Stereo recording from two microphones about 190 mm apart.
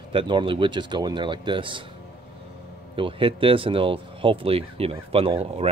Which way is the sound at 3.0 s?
30° right (ahead or behind).